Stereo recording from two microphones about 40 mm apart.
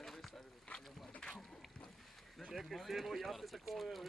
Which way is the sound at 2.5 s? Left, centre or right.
Centre.